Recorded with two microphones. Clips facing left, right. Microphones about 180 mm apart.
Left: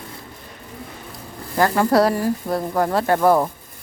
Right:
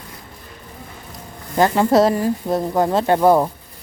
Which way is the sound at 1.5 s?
20° right (ahead or behind).